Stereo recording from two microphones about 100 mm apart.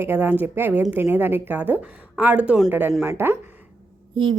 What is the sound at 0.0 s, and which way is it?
Speech, 20° right (ahead or behind).